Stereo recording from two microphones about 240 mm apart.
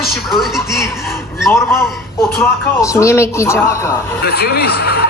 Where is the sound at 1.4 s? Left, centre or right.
Centre.